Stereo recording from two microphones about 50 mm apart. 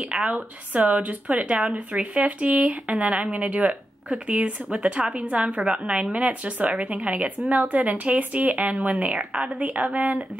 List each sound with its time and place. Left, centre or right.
0.0 s speech: right
5.6 s a woman's voice: centre
6.1 s speech: right